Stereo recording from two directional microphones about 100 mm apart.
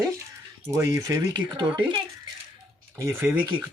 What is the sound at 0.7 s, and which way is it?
Speech, 30° right (ahead or behind).